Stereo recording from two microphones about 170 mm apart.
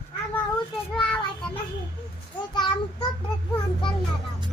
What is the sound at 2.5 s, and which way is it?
Child singing, 25° left (ahead or behind).